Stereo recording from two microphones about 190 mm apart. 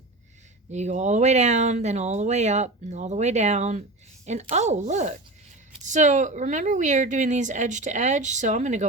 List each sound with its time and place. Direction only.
0.7 s speech: 35° right (ahead or behind)